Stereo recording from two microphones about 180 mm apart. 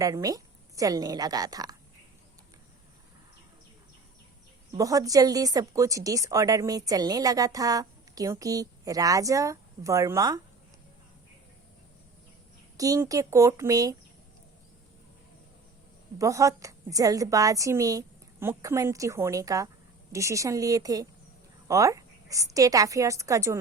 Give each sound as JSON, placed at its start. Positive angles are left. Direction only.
{"t": 0.0, "sound": "speech", "side_deg": -20}
{"t": 4.8, "sound": "speech", "side_deg": -20}
{"t": 12.7, "sound": "speech", "side_deg": -20}
{"t": 16.1, "sound": "a woman's voice", "side_deg": -20}